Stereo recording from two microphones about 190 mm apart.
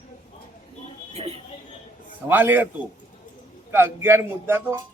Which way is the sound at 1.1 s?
30° right (ahead or behind).